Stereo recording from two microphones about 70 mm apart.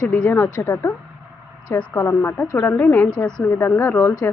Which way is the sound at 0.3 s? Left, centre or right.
Left.